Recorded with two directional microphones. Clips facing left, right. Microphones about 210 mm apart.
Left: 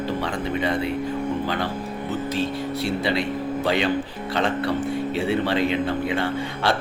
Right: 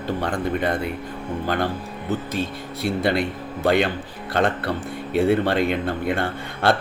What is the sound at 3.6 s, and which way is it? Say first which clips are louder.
A man's voice: right 4 dB; 50° right (ahead or behind).